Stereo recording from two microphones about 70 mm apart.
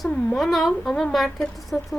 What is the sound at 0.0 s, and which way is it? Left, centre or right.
Speech, centre.